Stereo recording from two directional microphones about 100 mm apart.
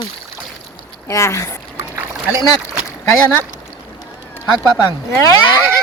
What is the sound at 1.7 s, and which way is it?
Rowboat, 25° right (ahead or behind).